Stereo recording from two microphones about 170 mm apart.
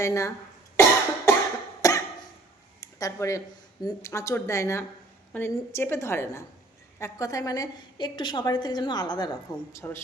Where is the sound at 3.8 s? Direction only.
15° left (ahead or behind).